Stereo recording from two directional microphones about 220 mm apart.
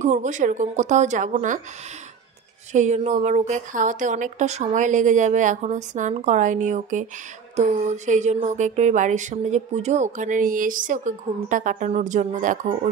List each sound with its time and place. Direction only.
0.0 s speech: 35° right (ahead or behind)
2.7 s speech: 35° right (ahead or behind)